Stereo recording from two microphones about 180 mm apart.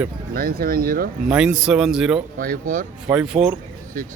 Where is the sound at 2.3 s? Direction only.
50° right (ahead or behind).